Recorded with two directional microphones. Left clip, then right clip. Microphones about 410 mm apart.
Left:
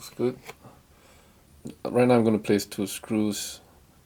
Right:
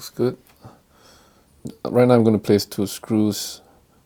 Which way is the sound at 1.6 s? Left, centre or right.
Right.